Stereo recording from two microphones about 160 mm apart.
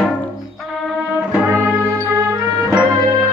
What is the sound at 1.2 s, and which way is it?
Music, 10° right (ahead or behind).